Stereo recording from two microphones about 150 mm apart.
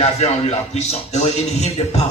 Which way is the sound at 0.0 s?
45° left (ahead or behind).